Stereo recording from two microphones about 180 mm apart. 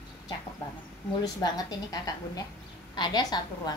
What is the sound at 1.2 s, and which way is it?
A woman's voice, 20° left (ahead or behind).